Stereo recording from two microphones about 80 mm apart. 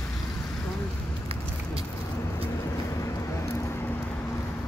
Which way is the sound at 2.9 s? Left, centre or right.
Left.